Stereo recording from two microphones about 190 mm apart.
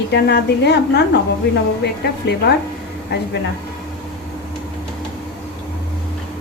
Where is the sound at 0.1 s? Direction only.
60° left (ahead or behind).